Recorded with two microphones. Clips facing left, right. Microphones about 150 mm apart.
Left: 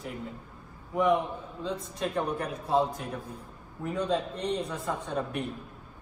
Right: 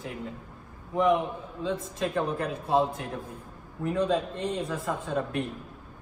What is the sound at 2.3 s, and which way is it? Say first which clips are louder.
Speech: right 2 dB; 25° right (ahead or behind).